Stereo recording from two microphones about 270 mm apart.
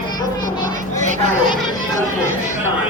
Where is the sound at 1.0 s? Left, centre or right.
Right.